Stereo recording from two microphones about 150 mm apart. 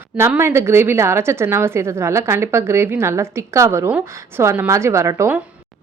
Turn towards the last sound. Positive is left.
turn(degrees=-15)  # may be behind; listen again after turning